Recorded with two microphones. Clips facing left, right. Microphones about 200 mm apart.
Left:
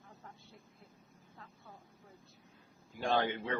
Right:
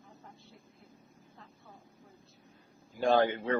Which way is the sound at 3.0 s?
45° right (ahead or behind).